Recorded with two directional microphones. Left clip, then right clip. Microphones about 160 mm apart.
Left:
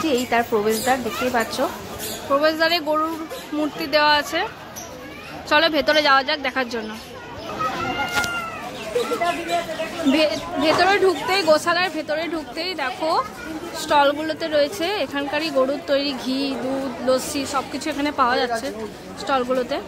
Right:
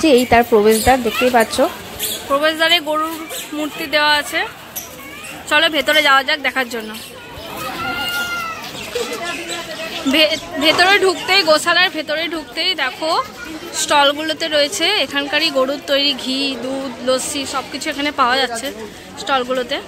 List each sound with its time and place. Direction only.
0.0 s a woman's voice: 35° right (ahead or behind)
2.3 s speech: centre (ahead or behind)
5.5 s speech: centre (ahead or behind)
10.1 s speech: centre (ahead or behind)